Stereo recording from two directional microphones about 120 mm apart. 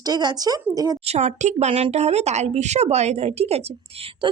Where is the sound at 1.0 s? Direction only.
65° right (ahead or behind).